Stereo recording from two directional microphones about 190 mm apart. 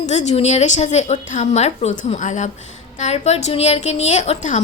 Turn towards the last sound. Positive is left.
turn(degrees=35)  # may be behind; listen again after turning